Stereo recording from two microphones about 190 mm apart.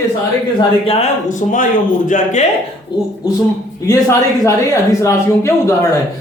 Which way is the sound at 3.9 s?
15° left (ahead or behind).